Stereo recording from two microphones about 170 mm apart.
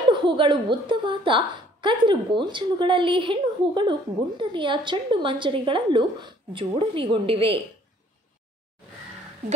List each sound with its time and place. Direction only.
0.1 s a woman's voice: 30° right (ahead or behind)